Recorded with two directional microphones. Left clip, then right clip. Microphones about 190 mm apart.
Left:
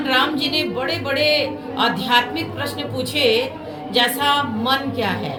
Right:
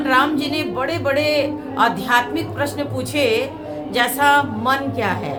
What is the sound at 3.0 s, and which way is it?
Speech, 40° right (ahead or behind).